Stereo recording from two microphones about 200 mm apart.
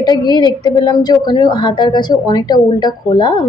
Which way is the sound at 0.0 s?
20° left (ahead or behind).